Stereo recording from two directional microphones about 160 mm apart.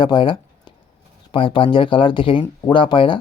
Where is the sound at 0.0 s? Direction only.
30° left (ahead or behind).